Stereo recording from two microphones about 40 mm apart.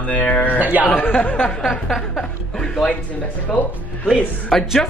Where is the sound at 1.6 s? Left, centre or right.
Centre.